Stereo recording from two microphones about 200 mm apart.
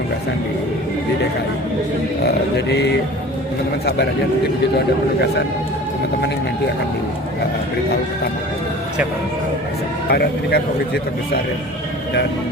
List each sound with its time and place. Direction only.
2.2 s mantra: 60° left (ahead or behind)
10.1 s a man's voice: 55° left (ahead or behind)